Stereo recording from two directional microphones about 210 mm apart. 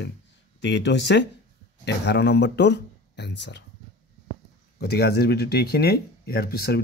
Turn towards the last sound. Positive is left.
turn(degrees=50)  # may be behind; listen again after turning